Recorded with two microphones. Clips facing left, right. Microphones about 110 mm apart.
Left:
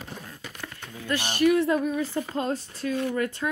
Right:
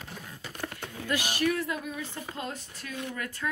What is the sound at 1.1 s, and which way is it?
Speech, 10° right (ahead or behind).